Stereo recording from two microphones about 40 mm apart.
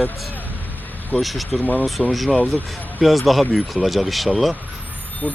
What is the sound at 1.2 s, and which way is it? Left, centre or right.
Speech, centre.